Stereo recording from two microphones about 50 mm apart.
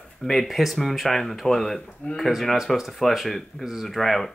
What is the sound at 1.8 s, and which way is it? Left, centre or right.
Speech, centre.